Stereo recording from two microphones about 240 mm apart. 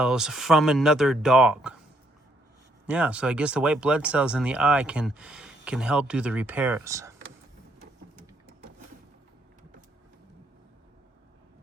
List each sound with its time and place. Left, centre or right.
0.0 s speech: centre
2.8 s speech: centre